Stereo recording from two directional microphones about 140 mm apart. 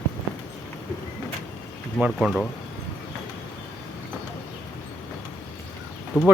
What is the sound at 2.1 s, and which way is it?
Speech, 5° left (ahead or behind).